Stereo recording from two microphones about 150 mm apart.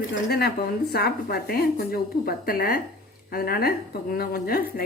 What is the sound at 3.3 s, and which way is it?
Speech, 90° left.